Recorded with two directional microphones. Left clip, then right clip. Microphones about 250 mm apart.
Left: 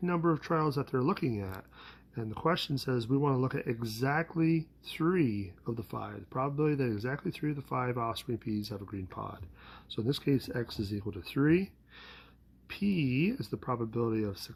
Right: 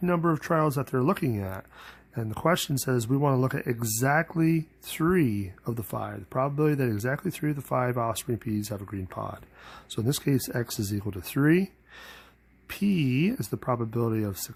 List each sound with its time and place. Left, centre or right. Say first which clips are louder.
0.0 s speech: right 5 dB; right